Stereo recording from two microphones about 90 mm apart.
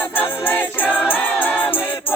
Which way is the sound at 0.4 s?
20° left (ahead or behind).